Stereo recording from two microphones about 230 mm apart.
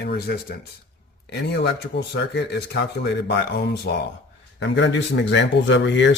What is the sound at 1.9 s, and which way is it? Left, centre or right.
Speech, left.